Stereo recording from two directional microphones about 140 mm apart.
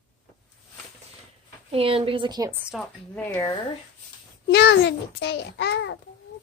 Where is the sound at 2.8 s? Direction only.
10° left (ahead or behind).